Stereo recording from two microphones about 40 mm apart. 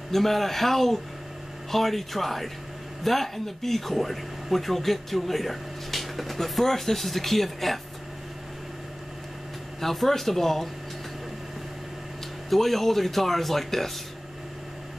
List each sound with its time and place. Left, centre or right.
0.1 s speech: centre
9.8 s speech: centre
12.4 s speech: centre